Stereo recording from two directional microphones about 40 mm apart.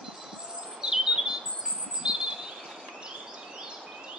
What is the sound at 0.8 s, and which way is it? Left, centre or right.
Bird, centre.